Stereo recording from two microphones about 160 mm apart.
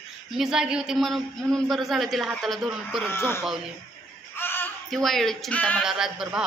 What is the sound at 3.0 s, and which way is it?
Speech, 15° left (ahead or behind).